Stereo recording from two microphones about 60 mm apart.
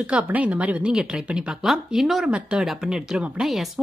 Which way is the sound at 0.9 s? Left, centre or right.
Centre.